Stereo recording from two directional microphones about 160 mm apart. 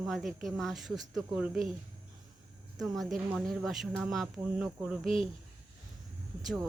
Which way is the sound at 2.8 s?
Centre (ahead or behind).